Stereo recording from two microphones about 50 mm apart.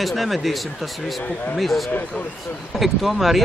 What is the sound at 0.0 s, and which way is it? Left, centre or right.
Speech, centre.